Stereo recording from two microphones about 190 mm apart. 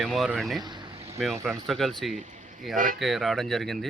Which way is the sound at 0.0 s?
Centre (ahead or behind).